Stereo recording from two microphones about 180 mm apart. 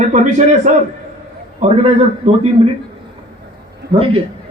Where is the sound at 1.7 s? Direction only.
35° right (ahead or behind).